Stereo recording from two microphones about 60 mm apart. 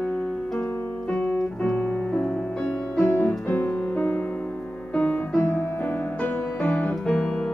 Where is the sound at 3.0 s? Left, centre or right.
Left.